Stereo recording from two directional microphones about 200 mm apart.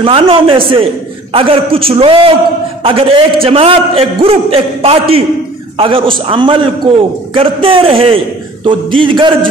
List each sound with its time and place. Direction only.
0.0 s a man's voice: 25° right (ahead or behind)